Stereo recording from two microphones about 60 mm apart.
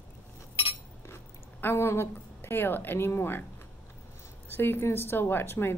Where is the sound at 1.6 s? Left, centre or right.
Left.